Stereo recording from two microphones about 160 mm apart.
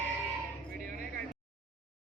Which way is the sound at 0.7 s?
60° right (ahead or behind).